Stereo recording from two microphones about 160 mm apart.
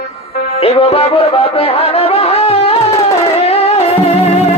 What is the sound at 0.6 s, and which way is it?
Music, 40° left (ahead or behind).